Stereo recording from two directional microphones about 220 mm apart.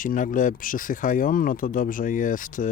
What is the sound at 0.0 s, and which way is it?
Speech, 40° left (ahead or behind).